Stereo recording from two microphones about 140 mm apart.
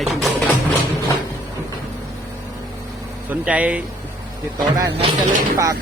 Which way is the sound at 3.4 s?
10° right (ahead or behind).